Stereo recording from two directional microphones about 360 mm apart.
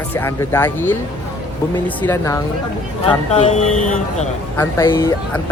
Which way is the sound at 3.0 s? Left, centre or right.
Centre.